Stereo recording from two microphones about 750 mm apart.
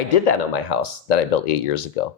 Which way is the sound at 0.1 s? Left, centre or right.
Left.